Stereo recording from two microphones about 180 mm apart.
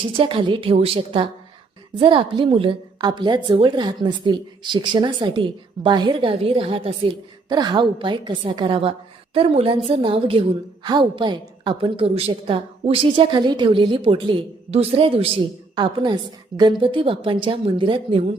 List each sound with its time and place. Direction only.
0.0 s a woman's voice: 30° right (ahead or behind)